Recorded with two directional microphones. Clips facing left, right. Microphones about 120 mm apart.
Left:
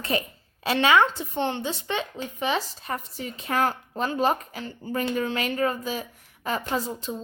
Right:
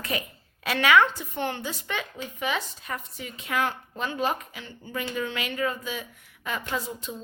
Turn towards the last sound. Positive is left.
turn(degrees=35)  # may be behind; listen again after turning